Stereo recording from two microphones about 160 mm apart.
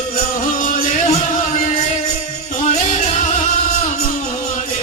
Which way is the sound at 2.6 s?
45° left (ahead or behind).